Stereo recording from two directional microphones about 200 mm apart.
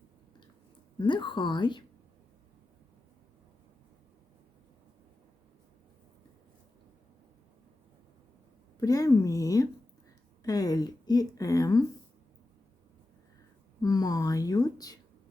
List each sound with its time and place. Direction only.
0.9 s a woman's voice: 25° left (ahead or behind)
8.8 s a woman's voice: 15° left (ahead or behind)
13.8 s a woman's voice: 20° left (ahead or behind)